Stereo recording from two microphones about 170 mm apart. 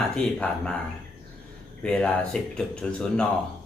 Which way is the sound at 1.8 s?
5° left (ahead or behind).